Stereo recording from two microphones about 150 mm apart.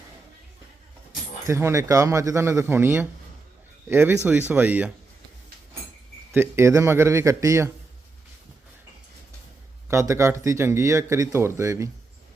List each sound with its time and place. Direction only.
1.5 s speech: 20° right (ahead or behind)
6.3 s speech: 15° right (ahead or behind)
9.9 s speech: 20° right (ahead or behind)